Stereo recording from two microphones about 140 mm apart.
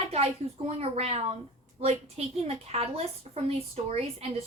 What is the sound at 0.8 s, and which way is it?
A woman's voice, 45° right (ahead or behind).